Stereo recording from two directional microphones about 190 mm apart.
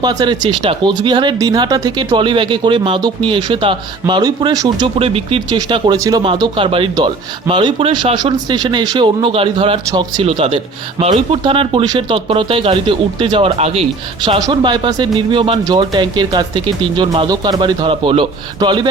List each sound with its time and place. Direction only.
0.0 s speech: 20° right (ahead or behind)